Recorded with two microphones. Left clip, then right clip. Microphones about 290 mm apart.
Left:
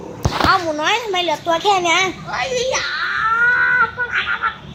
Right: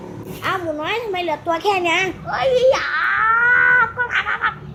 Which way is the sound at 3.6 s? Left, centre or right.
Right.